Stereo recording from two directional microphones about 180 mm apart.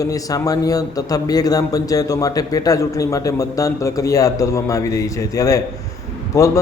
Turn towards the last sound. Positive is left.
turn(degrees=20)  # may be behind; listen again after turning